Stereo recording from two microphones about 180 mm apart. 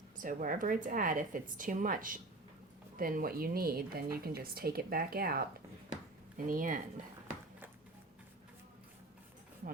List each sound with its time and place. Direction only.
0.2 s a woman's voice: 50° right (ahead or behind)